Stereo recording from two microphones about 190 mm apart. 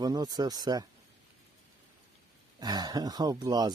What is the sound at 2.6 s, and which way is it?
Speech, 20° right (ahead or behind).